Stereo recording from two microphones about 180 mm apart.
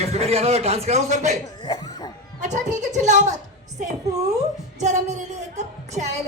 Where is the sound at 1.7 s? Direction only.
20° left (ahead or behind).